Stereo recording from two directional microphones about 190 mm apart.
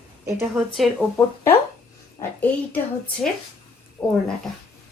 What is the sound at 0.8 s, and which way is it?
Speech, centre (ahead or behind).